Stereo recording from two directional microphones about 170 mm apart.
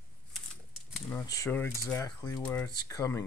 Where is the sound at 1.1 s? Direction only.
20° left (ahead or behind).